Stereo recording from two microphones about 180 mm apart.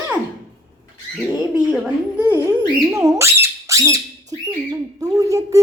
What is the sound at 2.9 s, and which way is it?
Squawk, 15° right (ahead or behind).